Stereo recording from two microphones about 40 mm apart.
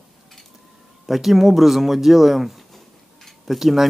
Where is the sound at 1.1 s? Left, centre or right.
Centre.